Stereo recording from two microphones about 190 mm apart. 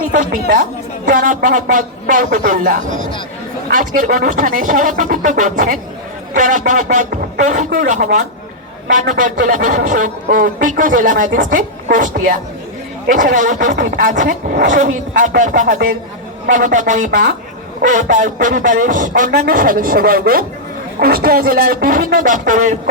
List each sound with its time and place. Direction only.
0.3 s speech: 55° right (ahead or behind)